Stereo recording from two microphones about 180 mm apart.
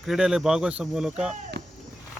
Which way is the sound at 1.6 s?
70° right (ahead or behind).